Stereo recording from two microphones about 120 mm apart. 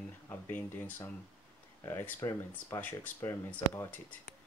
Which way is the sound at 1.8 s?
20° left (ahead or behind).